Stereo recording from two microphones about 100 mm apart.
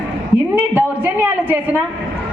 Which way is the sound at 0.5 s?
20° right (ahead or behind).